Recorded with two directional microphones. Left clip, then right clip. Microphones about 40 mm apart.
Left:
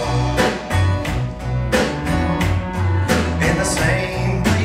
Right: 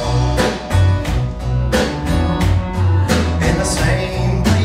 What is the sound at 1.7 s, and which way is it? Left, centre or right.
Music, centre.